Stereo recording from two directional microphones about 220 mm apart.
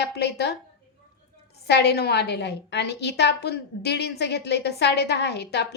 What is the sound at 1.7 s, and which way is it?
A woman's voice, 50° left (ahead or behind).